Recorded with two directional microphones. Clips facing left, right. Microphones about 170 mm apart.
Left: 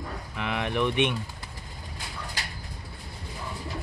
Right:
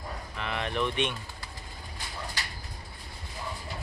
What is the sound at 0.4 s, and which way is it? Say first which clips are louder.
Speech: left 3 dB; 15° left (ahead or behind).